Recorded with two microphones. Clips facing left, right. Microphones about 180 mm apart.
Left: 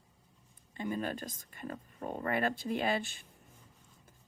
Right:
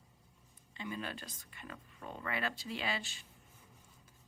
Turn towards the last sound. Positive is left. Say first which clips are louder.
# left 7 dB
turn(degrees=55)  # may be behind; listen again after turning